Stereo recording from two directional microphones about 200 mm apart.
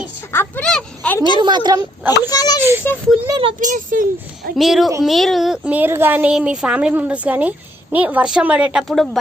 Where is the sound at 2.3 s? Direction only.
20° left (ahead or behind).